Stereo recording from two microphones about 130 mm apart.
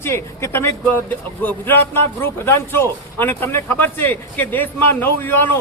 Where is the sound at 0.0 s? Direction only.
20° left (ahead or behind).